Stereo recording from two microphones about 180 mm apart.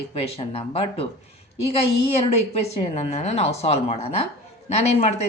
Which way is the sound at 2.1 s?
35° left (ahead or behind).